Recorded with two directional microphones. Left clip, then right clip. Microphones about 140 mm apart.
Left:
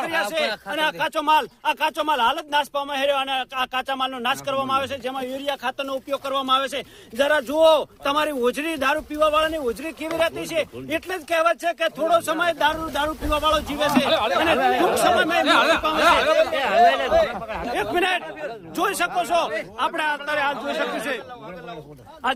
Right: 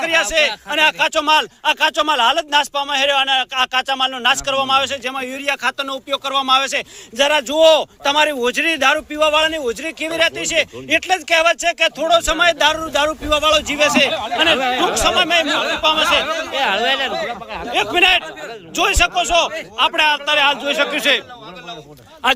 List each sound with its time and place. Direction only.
0.0 s speech: 15° right (ahead or behind)
16.6 s speech: 30° right (ahead or behind)
17.7 s a man's voice: 5° right (ahead or behind)
19.5 s a man's voice: 15° right (ahead or behind); by 21.2 s 35° right (ahead or behind)